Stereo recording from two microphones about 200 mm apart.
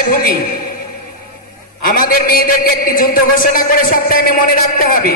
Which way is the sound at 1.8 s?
45° left (ahead or behind).